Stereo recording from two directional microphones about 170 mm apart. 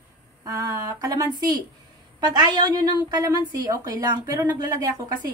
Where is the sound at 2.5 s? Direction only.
25° right (ahead or behind).